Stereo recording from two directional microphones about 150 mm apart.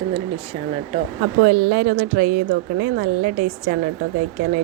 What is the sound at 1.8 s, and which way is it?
A woman's voice, 90° right.